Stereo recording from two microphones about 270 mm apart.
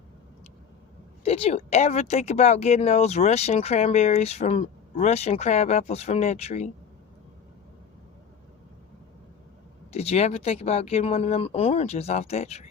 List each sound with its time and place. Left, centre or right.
1.2 s speech: left
9.9 s speech: left